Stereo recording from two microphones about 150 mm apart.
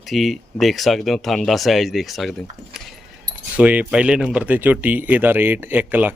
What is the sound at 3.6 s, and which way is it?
Speech, 10° right (ahead or behind).